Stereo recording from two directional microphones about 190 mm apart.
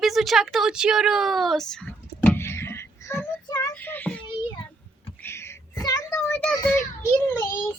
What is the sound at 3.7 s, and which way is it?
Child singing, 10° left (ahead or behind).